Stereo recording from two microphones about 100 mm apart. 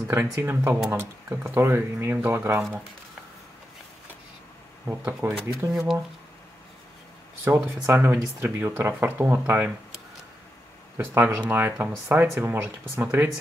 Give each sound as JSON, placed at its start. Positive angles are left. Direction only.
{"t": 0.1, "sound": "speech", "side_deg": -25}
{"t": 4.8, "sound": "speech", "side_deg": -20}
{"t": 5.6, "sound": "speech", "side_deg": -30}
{"t": 7.4, "sound": "speech", "side_deg": -25}
{"t": 11.1, "sound": "speech", "side_deg": -20}